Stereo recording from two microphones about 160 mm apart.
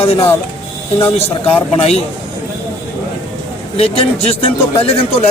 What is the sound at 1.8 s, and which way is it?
Speech, 40° left (ahead or behind).